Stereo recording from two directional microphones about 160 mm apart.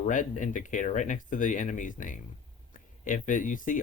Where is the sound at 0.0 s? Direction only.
55° left (ahead or behind).